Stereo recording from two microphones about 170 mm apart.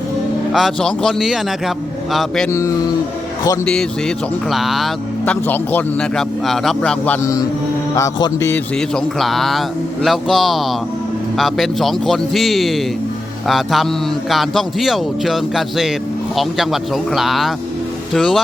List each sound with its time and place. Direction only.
0.5 s a man's voice: centre (ahead or behind)
2.5 s music: 15° left (ahead or behind)
4.4 s a man's voice: centre (ahead or behind)
7.9 s music: 20° left (ahead or behind)
9.0 s a man's voice: centre (ahead or behind)